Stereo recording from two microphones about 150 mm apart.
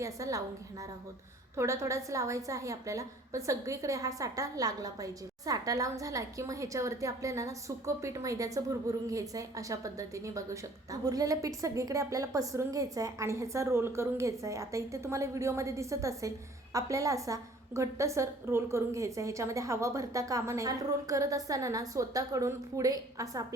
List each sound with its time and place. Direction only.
0.0 s a woman's voice: 20° right (ahead or behind)